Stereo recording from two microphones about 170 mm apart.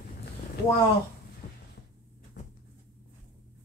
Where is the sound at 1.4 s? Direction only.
40° left (ahead or behind).